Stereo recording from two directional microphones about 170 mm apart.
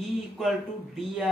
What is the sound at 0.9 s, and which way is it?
Speech, centre (ahead or behind).